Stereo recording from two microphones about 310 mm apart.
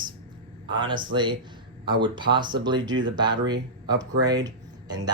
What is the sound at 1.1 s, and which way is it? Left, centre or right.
Speech, centre.